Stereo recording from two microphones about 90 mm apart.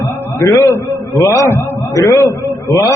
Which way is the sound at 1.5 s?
25° left (ahead or behind).